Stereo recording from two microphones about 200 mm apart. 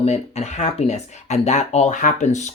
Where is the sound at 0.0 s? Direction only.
35° left (ahead or behind).